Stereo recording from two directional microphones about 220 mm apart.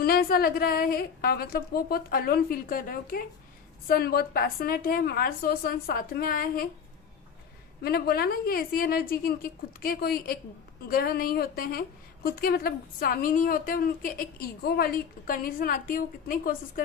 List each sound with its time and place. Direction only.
0.0 s a woman's voice: 45° left (ahead or behind)
7.8 s a woman's voice: 45° left (ahead or behind)